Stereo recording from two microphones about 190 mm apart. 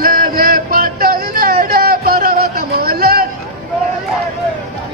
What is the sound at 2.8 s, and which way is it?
Chatter, 55° right (ahead or behind).